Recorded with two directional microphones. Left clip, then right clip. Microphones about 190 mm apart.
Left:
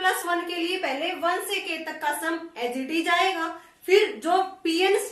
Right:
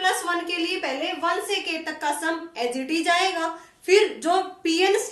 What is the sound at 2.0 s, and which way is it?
A woman's voice, 30° right (ahead or behind).